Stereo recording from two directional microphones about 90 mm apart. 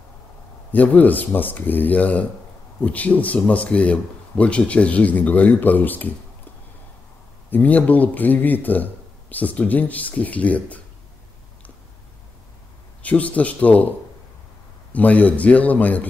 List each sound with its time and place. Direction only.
0.7 s speech: 20° left (ahead or behind)
7.5 s speech: 15° left (ahead or behind)
13.0 s speech: 15° left (ahead or behind)
14.9 s speech: 15° left (ahead or behind)